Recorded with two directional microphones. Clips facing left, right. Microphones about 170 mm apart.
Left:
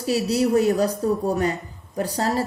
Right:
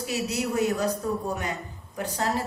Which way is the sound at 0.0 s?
35° left (ahead or behind).